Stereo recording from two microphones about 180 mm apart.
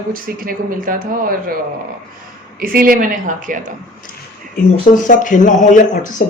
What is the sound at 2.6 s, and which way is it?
A man's voice, 55° right (ahead or behind).